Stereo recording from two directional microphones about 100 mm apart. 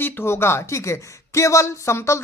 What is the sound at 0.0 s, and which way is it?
Speech, 20° left (ahead or behind).